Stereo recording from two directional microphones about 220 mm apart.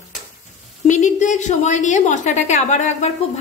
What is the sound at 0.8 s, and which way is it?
A woman's voice, 35° left (ahead or behind).